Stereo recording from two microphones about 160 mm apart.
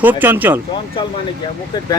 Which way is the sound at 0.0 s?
10° right (ahead or behind).